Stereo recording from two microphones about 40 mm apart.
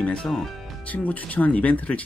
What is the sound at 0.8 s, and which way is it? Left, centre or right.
Speech, left.